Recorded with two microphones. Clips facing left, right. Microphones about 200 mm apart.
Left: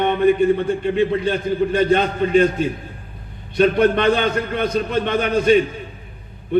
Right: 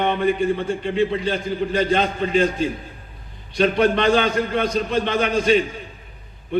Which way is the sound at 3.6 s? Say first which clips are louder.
Left 3 dB; 50° left (ahead or behind).